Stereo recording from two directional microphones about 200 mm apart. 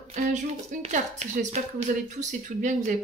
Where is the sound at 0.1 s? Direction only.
35° right (ahead or behind).